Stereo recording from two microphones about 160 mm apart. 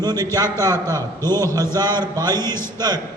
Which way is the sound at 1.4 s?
20° right (ahead or behind).